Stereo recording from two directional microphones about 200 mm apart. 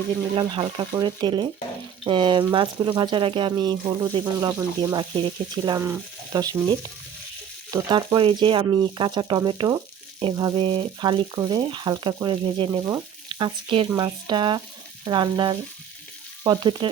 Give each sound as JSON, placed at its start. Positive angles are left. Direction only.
{"t": 0.3, "sound": "speech", "side_deg": -25}